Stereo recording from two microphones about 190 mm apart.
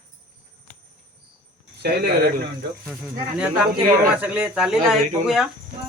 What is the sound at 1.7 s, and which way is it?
Speech, 55° right (ahead or behind).